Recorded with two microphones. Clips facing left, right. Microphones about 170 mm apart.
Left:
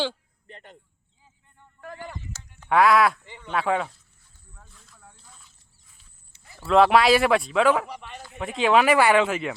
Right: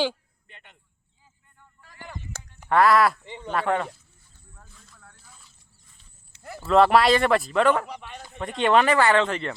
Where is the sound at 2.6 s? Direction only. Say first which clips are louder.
Even; centre (ahead or behind).